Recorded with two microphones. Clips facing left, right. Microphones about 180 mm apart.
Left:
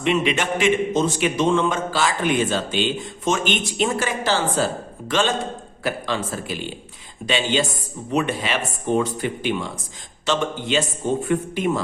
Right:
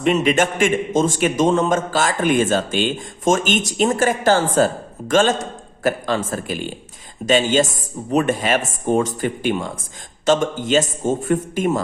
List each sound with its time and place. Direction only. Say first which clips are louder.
0.0 s a man's voice: right 4 dB; 45° right (ahead or behind)